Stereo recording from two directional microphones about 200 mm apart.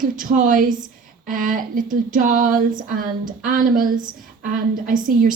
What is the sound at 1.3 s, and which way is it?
Female singing, 45° right (ahead or behind).